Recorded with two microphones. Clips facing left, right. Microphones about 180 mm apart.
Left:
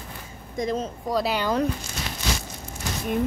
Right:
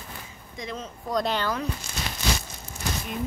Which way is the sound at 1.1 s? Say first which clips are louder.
Left 1 dB; 10° left (ahead or behind).